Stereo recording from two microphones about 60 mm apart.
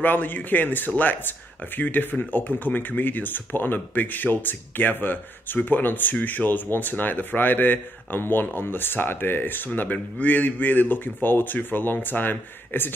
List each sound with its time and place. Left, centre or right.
0.0 s speech: left